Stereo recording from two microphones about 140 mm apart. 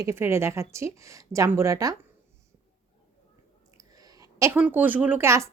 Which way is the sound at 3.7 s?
25° right (ahead or behind).